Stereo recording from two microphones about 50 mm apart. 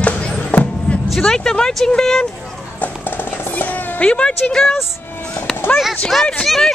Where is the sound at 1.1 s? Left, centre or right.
Centre.